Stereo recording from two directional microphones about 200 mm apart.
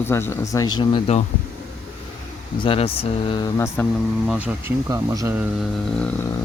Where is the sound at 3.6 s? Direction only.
10° left (ahead or behind).